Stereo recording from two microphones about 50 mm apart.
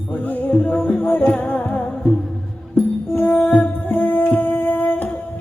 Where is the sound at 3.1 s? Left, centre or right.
Left.